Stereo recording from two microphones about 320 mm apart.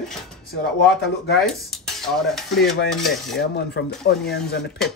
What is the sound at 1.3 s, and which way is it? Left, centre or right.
Dishes, centre.